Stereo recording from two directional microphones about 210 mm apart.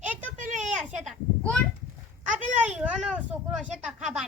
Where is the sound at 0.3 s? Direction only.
35° right (ahead or behind).